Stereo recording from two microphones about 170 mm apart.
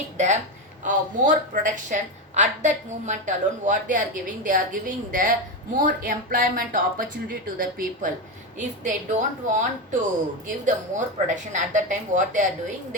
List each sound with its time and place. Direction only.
0.2 s a woman's voice: 45° right (ahead or behind)
11.5 s a woman's voice: 45° right (ahead or behind)